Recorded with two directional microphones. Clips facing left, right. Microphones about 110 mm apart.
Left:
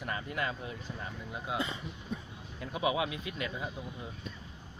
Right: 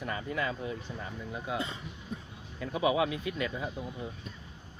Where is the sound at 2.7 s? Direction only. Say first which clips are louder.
Right 3 dB; 25° right (ahead or behind).